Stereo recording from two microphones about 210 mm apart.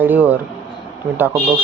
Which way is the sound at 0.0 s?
10° right (ahead or behind).